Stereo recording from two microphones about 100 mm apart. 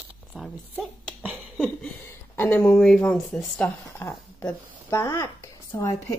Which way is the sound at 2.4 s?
20° left (ahead or behind).